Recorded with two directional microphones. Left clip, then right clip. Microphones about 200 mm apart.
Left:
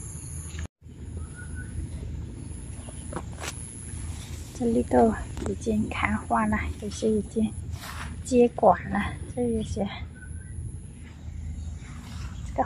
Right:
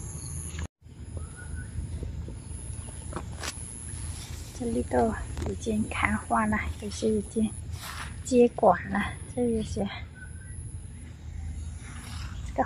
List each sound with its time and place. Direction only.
3.1 s vehicle: 20° left (ahead or behind)
4.6 s a woman's voice: 5° left (ahead or behind)
12.6 s a sound: centre (ahead or behind)